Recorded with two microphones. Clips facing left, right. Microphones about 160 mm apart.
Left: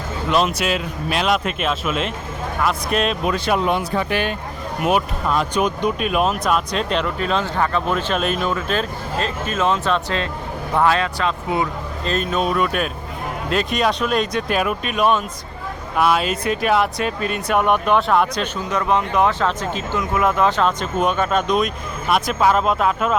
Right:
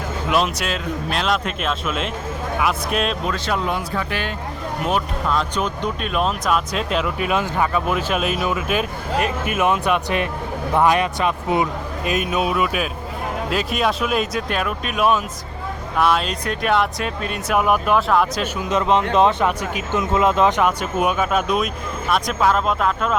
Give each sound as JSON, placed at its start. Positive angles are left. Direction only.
{"t": 0.3, "sound": "speech", "side_deg": 0}
{"t": 3.2, "sound": "speech", "side_deg": 15}
{"t": 4.8, "sound": "speech", "side_deg": 10}
{"t": 18.7, "sound": "speech", "side_deg": -20}